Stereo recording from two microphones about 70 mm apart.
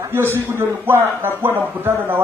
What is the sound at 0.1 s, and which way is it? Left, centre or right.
A man's voice, right.